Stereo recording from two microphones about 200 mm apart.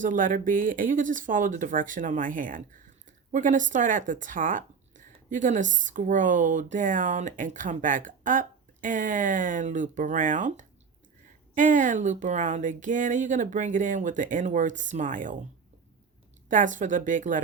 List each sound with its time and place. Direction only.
0.0 s speech: 40° right (ahead or behind)
16.5 s speech: 40° right (ahead or behind)